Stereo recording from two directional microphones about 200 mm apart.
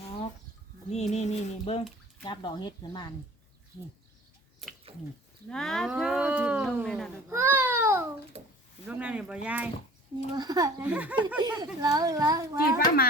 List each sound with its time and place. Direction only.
0.9 s a sound: 35° left (ahead or behind)
2.2 s speech: 20° left (ahead or behind)
5.5 s speech: 5° left (ahead or behind)
7.3 s baby cry: 15° right (ahead or behind)
8.9 s a child's voice: 5° right (ahead or behind)
10.3 s a child's voice: 20° right (ahead or behind)
10.8 s a child's voice: 5° right (ahead or behind)
11.3 s a child's voice: 20° right (ahead or behind)